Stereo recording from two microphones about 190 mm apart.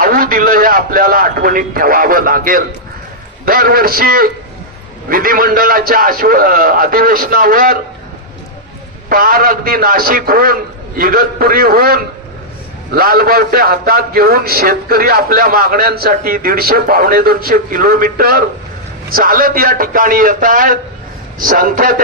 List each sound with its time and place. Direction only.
0.0 s a man's voice: 50° right (ahead or behind)
9.0 s a man's voice: 50° right (ahead or behind)